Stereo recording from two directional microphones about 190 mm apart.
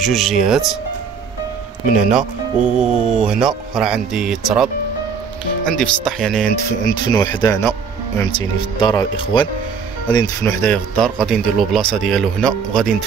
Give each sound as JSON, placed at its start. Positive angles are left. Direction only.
{"t": 0.0, "sound": "speech", "side_deg": 0}
{"t": 2.0, "sound": "speech", "side_deg": -5}
{"t": 5.7, "sound": "speech", "side_deg": 0}
{"t": 6.8, "sound": "speech", "side_deg": 20}
{"t": 8.7, "sound": "speech", "side_deg": 25}